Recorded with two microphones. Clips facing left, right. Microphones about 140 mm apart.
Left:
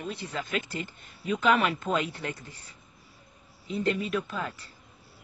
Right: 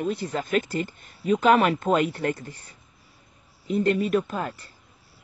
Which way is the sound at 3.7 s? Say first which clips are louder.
Right 6 dB; 50° right (ahead or behind).